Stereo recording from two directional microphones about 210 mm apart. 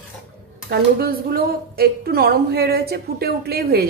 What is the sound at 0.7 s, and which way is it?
A woman's voice, 45° right (ahead or behind).